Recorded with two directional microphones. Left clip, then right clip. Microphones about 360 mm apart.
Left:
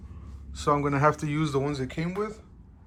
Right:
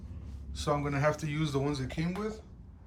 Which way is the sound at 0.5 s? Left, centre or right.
Centre.